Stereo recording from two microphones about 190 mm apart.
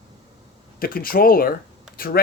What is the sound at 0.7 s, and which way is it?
Speech, 50° left (ahead or behind).